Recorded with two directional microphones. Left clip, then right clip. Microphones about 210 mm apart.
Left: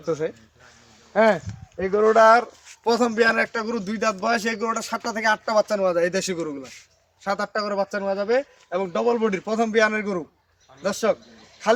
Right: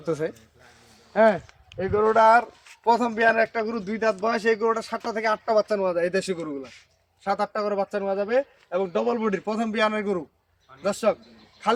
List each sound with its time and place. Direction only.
0.0 s speech: 25° right (ahead or behind)
1.1 s speech: 20° left (ahead or behind)